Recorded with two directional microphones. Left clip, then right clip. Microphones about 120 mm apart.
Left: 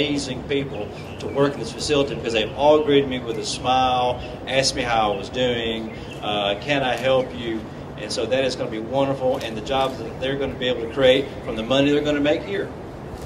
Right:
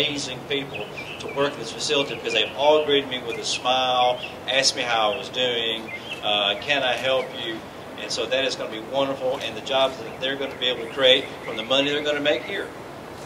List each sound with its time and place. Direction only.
0.0 s a man's voice: 20° right (ahead or behind)